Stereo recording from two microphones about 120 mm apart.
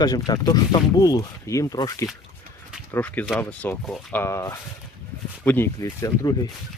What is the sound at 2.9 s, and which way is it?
Speech, 15° left (ahead or behind).